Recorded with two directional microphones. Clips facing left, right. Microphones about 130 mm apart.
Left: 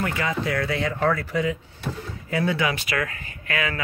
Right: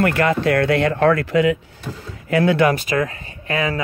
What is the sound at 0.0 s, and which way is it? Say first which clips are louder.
Speech: right 8 dB; 65° right (ahead or behind).